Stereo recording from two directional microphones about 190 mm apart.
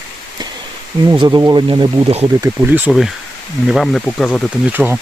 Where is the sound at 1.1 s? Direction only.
25° right (ahead or behind).